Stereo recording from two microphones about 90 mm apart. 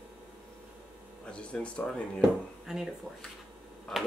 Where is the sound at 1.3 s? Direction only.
15° left (ahead or behind).